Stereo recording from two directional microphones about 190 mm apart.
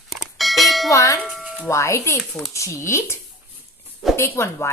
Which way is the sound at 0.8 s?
15° left (ahead or behind).